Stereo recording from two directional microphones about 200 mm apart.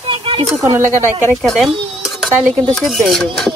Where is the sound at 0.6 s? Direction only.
15° right (ahead or behind).